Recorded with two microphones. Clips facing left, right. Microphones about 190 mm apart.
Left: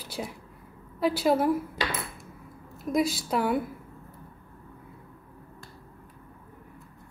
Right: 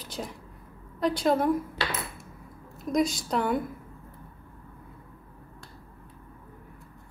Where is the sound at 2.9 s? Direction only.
5° left (ahead or behind).